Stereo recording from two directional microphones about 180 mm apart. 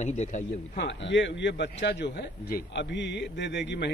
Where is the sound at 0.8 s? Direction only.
80° left.